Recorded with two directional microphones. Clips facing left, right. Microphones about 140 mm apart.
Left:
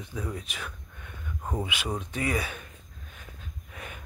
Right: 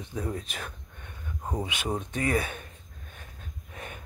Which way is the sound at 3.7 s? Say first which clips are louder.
Right 1 dB; 35° right (ahead or behind).